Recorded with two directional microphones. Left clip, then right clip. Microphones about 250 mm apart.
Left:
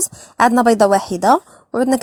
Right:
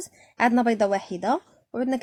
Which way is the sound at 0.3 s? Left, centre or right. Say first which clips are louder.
Left 9 dB; left.